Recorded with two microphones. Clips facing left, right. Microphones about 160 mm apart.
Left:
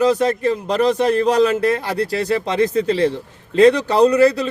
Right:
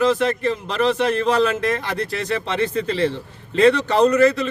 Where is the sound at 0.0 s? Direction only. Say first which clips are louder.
Left 2 dB; 40° left (ahead or behind).